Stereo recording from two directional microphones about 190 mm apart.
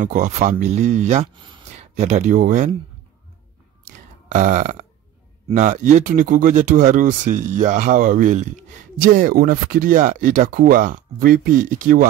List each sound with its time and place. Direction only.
0.0 s speech: 40° right (ahead or behind)
4.3 s speech: 45° right (ahead or behind)